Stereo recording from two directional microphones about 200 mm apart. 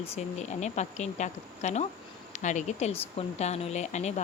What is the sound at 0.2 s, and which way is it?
A woman's voice, 35° left (ahead or behind).